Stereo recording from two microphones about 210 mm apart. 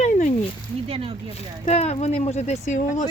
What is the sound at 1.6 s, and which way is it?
Speech, 30° left (ahead or behind).